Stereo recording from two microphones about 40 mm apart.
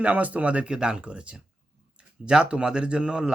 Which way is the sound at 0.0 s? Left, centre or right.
Right.